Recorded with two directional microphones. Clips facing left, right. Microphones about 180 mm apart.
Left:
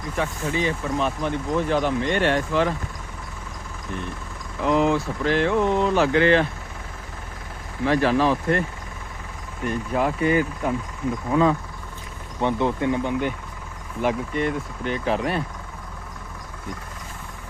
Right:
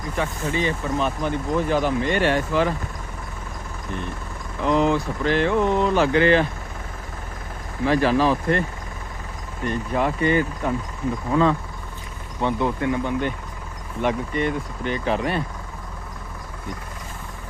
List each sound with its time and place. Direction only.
0.2 s speech: centre (ahead or behind)
4.6 s speech: 5° left (ahead or behind)
7.9 s speech: centre (ahead or behind)
9.6 s speech: 5° left (ahead or behind)
12.4 s speech: 20° left (ahead or behind)
14.0 s speech: centre (ahead or behind)